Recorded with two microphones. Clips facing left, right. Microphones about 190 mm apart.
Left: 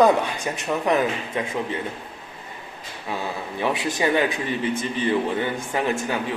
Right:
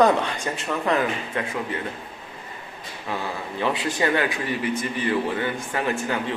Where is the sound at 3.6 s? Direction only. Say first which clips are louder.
Even; 15° left (ahead or behind).